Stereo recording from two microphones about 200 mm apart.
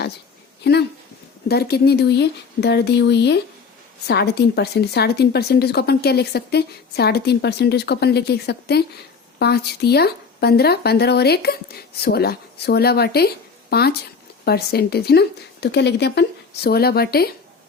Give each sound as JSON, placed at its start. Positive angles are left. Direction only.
{"t": 0.6, "sound": "speech", "side_deg": 55}